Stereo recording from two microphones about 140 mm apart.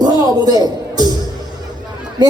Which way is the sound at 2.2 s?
30° right (ahead or behind).